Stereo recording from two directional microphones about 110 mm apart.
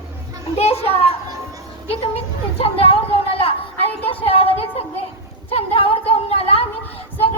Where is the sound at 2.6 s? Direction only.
60° left (ahead or behind).